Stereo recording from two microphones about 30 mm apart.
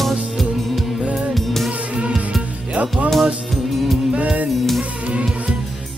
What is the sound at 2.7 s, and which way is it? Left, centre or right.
Music, right.